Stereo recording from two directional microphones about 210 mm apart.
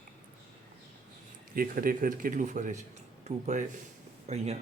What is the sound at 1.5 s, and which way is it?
Speech, 45° right (ahead or behind).